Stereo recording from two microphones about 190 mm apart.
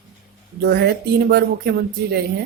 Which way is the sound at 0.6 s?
60° right (ahead or behind).